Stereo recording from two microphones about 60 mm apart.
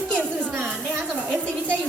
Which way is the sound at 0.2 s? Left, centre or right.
Right.